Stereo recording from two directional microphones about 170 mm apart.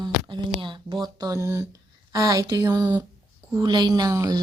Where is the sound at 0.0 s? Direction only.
25° right (ahead or behind).